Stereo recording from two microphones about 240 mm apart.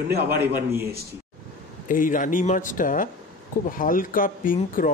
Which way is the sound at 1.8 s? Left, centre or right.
Left.